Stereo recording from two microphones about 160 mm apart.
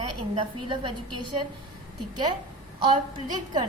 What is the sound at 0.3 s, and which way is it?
A woman's voice, 30° right (ahead or behind).